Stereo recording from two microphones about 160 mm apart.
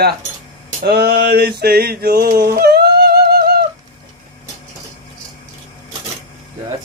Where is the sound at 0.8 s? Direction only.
85° right.